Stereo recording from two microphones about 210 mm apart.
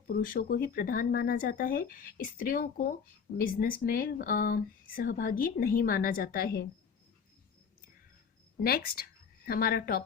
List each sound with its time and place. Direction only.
0.1 s speech: 45° left (ahead or behind)
8.5 s speech: 45° left (ahead or behind)